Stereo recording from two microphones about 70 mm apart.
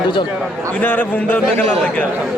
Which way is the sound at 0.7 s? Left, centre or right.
Left.